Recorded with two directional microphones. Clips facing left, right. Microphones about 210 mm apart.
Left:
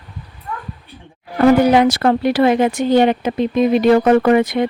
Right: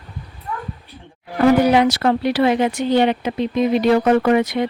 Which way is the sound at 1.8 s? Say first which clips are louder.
Left 2 dB; 50° left (ahead or behind).